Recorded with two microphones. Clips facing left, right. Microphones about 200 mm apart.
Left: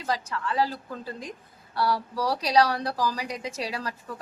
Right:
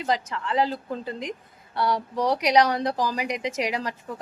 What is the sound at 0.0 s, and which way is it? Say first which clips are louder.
A woman's voice: right 3 dB; 20° right (ahead or behind).